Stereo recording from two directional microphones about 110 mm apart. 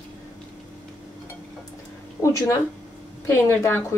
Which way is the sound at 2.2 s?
30° left (ahead or behind).